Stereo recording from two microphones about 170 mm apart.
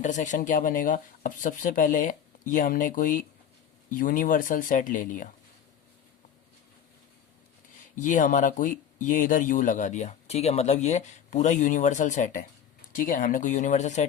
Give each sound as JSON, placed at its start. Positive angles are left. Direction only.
{"t": 0.0, "sound": "speech", "side_deg": 45}
{"t": 7.9, "sound": "speech", "side_deg": 50}